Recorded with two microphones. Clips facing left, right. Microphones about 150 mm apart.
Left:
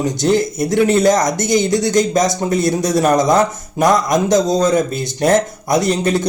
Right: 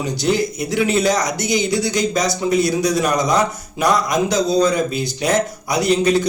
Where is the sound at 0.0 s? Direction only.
50° left (ahead or behind).